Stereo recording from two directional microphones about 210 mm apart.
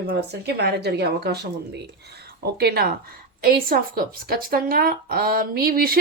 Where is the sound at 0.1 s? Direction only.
50° right (ahead or behind).